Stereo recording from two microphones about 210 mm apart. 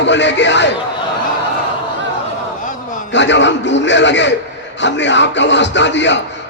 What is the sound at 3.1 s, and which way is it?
Speech, 60° left (ahead or behind).